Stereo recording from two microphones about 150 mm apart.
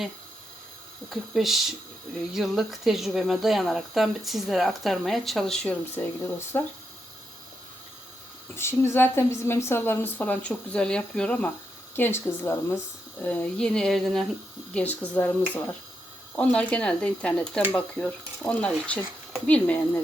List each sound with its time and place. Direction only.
1.1 s speech: centre (ahead or behind)
6.0 s a woman's voice: 15° left (ahead or behind)
8.5 s a woman's voice: 15° left (ahead or behind)